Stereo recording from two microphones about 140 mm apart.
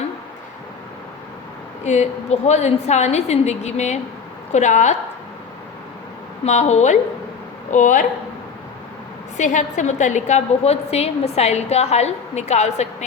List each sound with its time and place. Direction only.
1.8 s a woman's voice: 55° left (ahead or behind)
6.4 s a woman's voice: 55° left (ahead or behind)
9.4 s a woman's voice: 60° left (ahead or behind)